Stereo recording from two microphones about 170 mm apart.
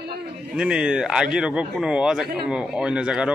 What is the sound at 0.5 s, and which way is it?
Speech, 5° right (ahead or behind).